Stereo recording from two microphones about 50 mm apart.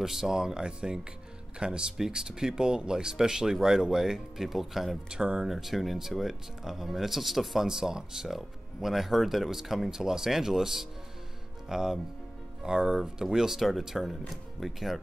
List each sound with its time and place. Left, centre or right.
0.0 s speech: centre
5.1 s speech: centre
5.5 s speech: centre